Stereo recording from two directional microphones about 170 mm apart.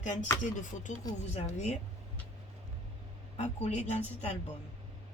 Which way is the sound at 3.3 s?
40° left (ahead or behind).